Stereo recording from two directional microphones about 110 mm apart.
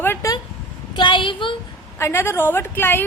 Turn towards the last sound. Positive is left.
turn(degrees=20)  # may be behind; listen again after turning